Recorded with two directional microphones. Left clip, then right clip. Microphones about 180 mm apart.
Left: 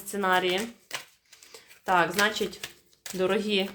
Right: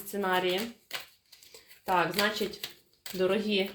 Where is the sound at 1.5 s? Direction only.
30° left (ahead or behind).